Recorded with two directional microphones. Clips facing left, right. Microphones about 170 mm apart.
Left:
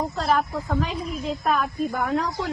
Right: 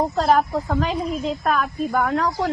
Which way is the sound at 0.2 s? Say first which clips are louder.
Right 5 dB; 60° right (ahead or behind).